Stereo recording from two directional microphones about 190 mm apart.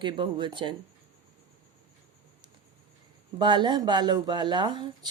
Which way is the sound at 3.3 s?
25° right (ahead or behind).